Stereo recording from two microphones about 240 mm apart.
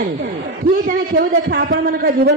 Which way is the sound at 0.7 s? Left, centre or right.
Right.